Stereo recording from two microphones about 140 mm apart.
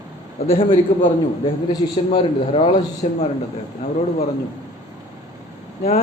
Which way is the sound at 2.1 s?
45° left (ahead or behind).